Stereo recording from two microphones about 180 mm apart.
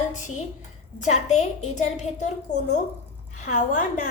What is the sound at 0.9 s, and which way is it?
A woman's voice, 40° left (ahead or behind).